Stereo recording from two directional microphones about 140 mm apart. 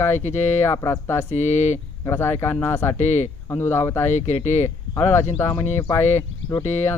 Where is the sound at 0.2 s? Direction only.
55° left (ahead or behind).